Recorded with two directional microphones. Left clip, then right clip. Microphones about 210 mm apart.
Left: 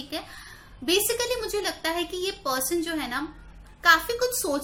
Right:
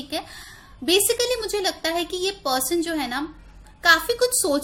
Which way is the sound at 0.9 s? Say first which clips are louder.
Right 4 dB; 35° right (ahead or behind).